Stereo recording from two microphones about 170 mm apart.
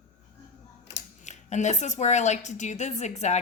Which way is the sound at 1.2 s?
45° left (ahead or behind).